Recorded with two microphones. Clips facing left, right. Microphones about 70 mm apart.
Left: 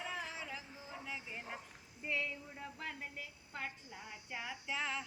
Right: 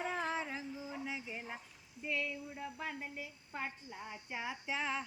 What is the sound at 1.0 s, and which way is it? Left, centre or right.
Music, centre.